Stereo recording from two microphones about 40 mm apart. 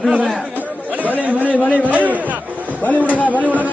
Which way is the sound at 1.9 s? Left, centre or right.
Right.